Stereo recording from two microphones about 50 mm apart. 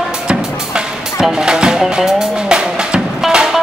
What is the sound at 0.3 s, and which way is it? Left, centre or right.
Music, centre.